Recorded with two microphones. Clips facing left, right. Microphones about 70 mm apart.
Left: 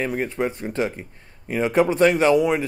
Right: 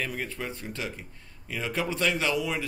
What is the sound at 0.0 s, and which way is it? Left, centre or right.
Speech, left.